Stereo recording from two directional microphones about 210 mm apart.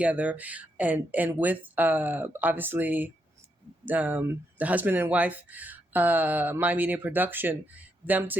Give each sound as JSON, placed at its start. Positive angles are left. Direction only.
{"t": 0.0, "sound": "speech", "side_deg": -5}